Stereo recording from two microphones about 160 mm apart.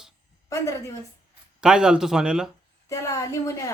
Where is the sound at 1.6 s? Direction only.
5° right (ahead or behind).